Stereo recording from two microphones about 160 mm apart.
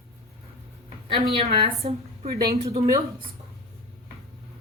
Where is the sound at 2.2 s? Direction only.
75° right (ahead or behind).